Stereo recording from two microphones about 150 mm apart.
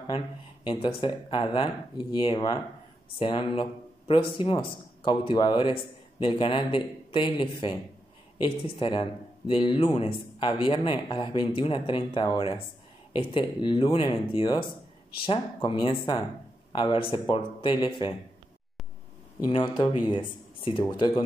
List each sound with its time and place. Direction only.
0.7 s speech: 35° left (ahead or behind)
19.4 s speech: 35° left (ahead or behind)